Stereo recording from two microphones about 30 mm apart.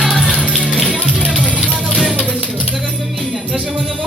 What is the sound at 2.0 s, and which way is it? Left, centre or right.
Music, right.